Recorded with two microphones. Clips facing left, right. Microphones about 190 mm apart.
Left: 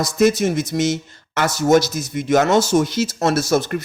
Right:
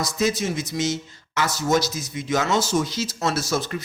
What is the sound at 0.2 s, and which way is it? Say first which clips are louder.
Speech: left 8 dB; 55° left (ahead or behind).